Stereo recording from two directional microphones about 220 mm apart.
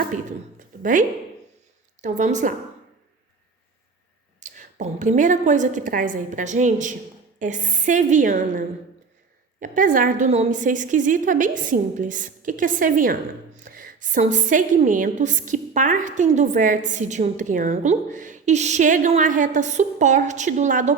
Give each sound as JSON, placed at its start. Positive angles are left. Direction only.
{"t": 0.0, "sound": "a woman's voice", "side_deg": -35}
{"t": 4.4, "sound": "a woman's voice", "side_deg": -35}